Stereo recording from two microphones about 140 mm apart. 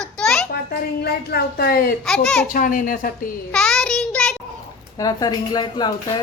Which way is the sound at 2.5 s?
75° left (ahead or behind).